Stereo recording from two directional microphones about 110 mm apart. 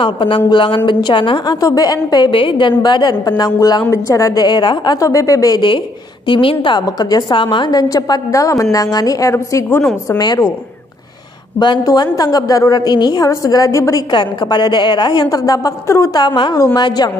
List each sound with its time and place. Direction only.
0.0 s a woman's voice: 50° left (ahead or behind); by 5.6 s 30° left (ahead or behind)
6.2 s a woman's voice: 50° left (ahead or behind); by 9.8 s 25° left (ahead or behind)
10.0 s a woman's voice: 40° left (ahead or behind)
11.6 s a woman's voice: 40° left (ahead or behind)
16.2 s a woman's voice: 45° left (ahead or behind)